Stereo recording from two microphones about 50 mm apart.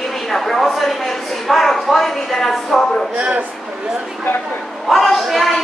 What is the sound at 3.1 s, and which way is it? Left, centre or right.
Speech, right.